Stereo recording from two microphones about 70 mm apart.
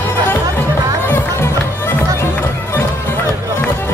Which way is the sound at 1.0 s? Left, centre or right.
Left.